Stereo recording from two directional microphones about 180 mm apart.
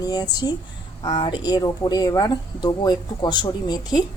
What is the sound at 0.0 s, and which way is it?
Speech, 20° left (ahead or behind).